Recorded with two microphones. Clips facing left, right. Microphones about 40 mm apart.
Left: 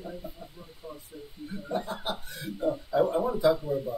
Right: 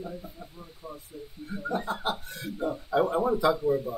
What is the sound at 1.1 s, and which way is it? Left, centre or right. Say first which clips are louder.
Speech: right 2 dB; centre.